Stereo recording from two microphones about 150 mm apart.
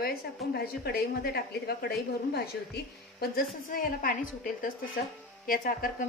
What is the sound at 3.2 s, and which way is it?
A woman's voice, 75° left (ahead or behind).